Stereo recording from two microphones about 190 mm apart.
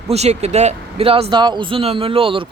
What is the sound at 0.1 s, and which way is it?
Speech, 35° right (ahead or behind).